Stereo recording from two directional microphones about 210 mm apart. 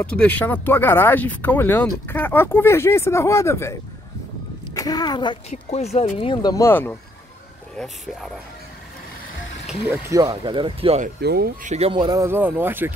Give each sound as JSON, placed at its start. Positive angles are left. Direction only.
{"t": 0.0, "sound": "speech", "side_deg": 5}
{"t": 4.7, "sound": "speech", "side_deg": 15}
{"t": 9.7, "sound": "speech", "side_deg": -10}
{"t": 11.1, "sound": "speech", "side_deg": -50}
{"t": 11.7, "sound": "speech", "side_deg": -25}